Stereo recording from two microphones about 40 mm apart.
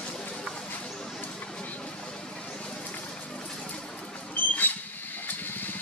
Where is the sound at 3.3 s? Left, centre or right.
Centre.